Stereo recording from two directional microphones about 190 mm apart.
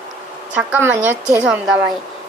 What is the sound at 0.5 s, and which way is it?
Speech, 10° right (ahead or behind).